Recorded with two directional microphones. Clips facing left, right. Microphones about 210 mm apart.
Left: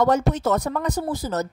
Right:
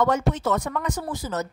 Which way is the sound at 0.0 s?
40° left (ahead or behind).